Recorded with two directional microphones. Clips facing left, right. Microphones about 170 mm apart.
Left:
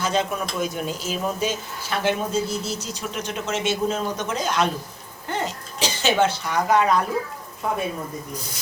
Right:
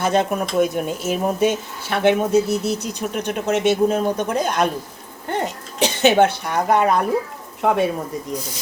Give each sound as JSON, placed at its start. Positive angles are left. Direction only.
{"t": 0.0, "sound": "speech", "side_deg": -55}
{"t": 7.6, "sound": "speech", "side_deg": -70}